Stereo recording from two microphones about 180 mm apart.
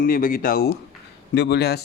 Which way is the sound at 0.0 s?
50° left (ahead or behind).